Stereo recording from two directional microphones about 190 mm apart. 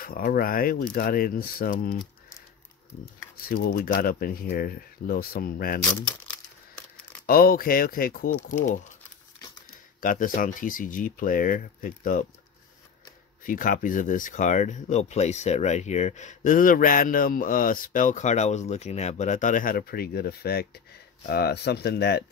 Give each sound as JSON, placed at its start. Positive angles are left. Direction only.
{"t": 0.0, "sound": "speech", "side_deg": 50}
{"t": 3.4, "sound": "speech", "side_deg": 55}
{"t": 7.2, "sound": "speech", "side_deg": 50}
{"t": 9.9, "sound": "speech", "side_deg": 45}
{"t": 13.4, "sound": "speech", "side_deg": 45}